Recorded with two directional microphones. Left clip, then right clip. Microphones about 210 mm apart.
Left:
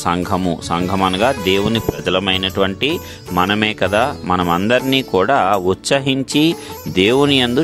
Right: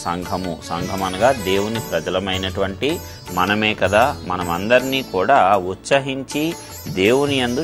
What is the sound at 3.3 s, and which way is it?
Speech, 40° left (ahead or behind).